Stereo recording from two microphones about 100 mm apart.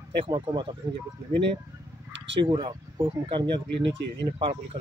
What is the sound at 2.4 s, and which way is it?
Speech, 55° right (ahead or behind).